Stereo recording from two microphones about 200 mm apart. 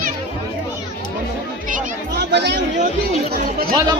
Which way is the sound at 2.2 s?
55° right (ahead or behind).